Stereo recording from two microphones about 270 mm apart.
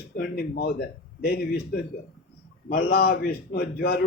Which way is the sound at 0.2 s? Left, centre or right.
Left.